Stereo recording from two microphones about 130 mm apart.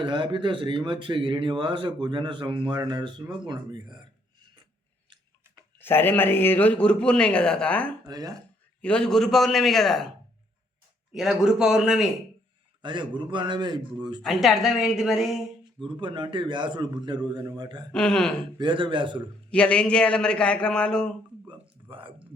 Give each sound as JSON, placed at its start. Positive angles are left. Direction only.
{"t": 0.0, "sound": "speech", "side_deg": -40}
{"t": 5.8, "sound": "speech", "side_deg": 15}
{"t": 8.0, "sound": "speech", "side_deg": -30}
{"t": 8.8, "sound": "a man's voice", "side_deg": 5}
{"t": 11.1, "sound": "a man's voice", "side_deg": -5}
{"t": 12.8, "sound": "speech", "side_deg": -40}
{"t": 14.2, "sound": "a man's voice", "side_deg": 0}
{"t": 15.8, "sound": "speech", "side_deg": -40}
{"t": 17.9, "sound": "a man's voice", "side_deg": 5}
{"t": 18.5, "sound": "speech", "side_deg": -40}
{"t": 19.5, "sound": "speech", "side_deg": 10}
{"t": 21.4, "sound": "a sound", "side_deg": -45}